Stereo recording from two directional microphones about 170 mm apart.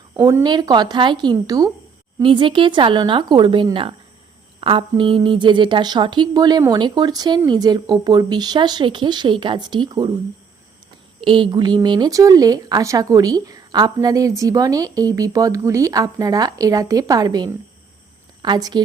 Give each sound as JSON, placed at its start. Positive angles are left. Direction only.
{"t": 0.2, "sound": "speech", "side_deg": -20}
{"t": 11.2, "sound": "speech", "side_deg": -30}